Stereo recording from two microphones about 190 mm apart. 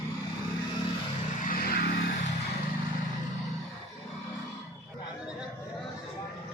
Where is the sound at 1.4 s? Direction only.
50° left (ahead or behind).